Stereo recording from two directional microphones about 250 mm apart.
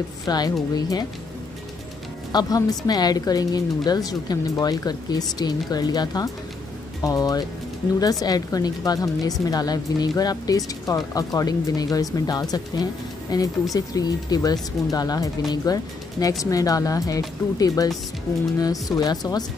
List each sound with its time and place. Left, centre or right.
0.3 s speech: centre
2.3 s speech: centre